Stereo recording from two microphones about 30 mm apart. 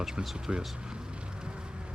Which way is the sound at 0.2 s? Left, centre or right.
Right.